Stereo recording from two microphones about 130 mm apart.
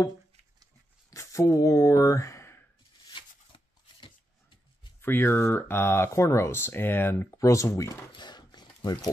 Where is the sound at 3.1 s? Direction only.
40° left (ahead or behind).